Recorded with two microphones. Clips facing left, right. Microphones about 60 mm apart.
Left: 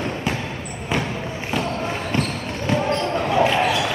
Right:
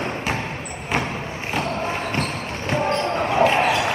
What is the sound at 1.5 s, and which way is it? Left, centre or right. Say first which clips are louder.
Basketball bounce: even; right.